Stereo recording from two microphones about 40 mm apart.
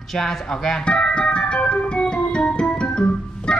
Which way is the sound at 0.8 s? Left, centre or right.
Left.